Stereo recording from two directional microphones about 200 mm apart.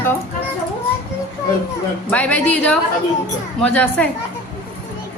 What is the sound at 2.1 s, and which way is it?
A woman's voice, 5° left (ahead or behind).